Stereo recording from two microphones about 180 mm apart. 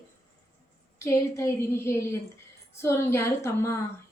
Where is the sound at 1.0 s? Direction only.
15° left (ahead or behind).